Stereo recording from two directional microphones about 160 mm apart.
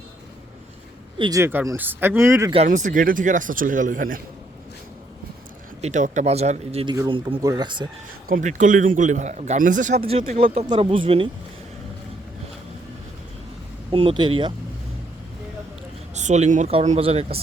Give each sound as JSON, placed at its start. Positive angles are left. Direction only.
{"t": 1.2, "sound": "speech", "side_deg": -20}
{"t": 2.6, "sound": "speech", "side_deg": -55}
{"t": 5.8, "sound": "a man's voice", "side_deg": -50}
{"t": 7.4, "sound": "speech", "side_deg": -25}
{"t": 8.3, "sound": "a man's voice", "side_deg": -55}
{"t": 10.0, "sound": "speech", "side_deg": -35}
{"t": 13.9, "sound": "speech", "side_deg": -35}
{"t": 16.1, "sound": "a man's voice", "side_deg": -45}